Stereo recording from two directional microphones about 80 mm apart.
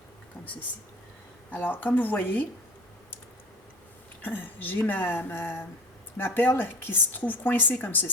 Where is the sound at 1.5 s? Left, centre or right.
Left.